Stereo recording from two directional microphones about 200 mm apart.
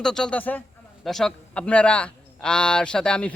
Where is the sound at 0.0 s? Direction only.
5° left (ahead or behind).